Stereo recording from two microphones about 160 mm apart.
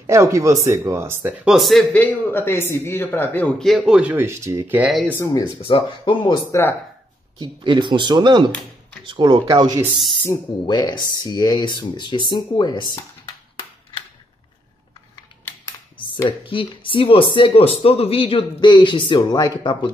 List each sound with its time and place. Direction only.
0.0 s speech: 20° right (ahead or behind)
5.0 s speech: 15° left (ahead or behind)
5.6 s speech: 30° left (ahead or behind)
7.3 s speech: 30° right (ahead or behind)
9.8 s speech: centre (ahead or behind)
10.6 s speech: 25° left (ahead or behind)
16.3 s speech: 30° left (ahead or behind)